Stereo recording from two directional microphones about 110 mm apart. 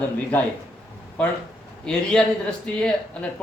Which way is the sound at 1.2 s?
10° left (ahead or behind).